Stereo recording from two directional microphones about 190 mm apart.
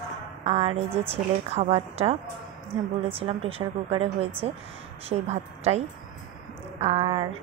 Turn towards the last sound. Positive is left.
turn(degrees=-30)  # may be behind; listen again after turning